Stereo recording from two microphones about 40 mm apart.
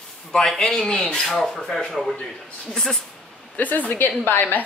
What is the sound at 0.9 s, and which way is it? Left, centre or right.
Speech, left.